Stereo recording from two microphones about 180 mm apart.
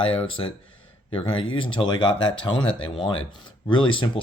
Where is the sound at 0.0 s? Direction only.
30° left (ahead or behind).